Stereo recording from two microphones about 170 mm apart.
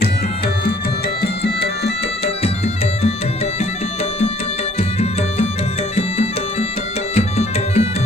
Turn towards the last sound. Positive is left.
turn(degrees=40)  # may be behind; listen again after turning